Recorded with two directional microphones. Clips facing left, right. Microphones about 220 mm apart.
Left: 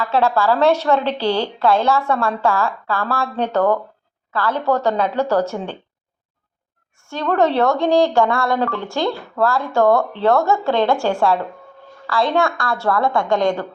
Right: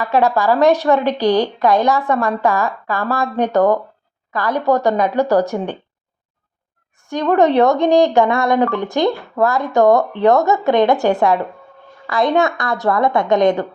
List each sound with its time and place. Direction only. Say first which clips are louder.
0.0 s a woman's voice: right 2 dB; 15° right (ahead or behind)
7.0 s speech: right 4 dB; 15° right (ahead or behind)